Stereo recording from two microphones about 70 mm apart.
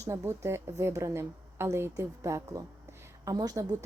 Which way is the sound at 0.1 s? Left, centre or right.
Right.